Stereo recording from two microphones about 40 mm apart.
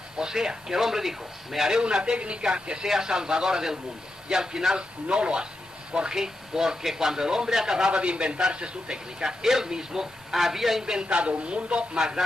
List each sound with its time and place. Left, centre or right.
0.2 s speech: centre
1.8 s a man's voice: right
7.9 s a man's voice: right
10.3 s a woman's voice: centre
10.8 s speech: centre
11.1 s a man's voice: right